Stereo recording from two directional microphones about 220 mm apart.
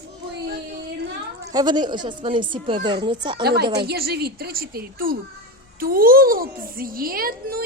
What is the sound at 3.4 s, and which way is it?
A child's voice, 45° right (ahead or behind).